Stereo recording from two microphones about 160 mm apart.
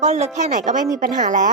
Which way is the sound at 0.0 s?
45° right (ahead or behind).